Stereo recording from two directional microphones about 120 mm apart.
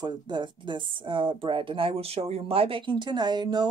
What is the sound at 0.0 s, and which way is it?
Speech, 40° right (ahead or behind).